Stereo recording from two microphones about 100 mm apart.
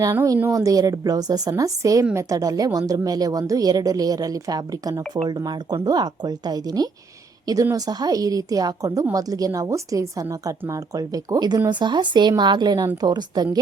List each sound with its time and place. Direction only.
0.5 s a woman's voice: 35° right (ahead or behind)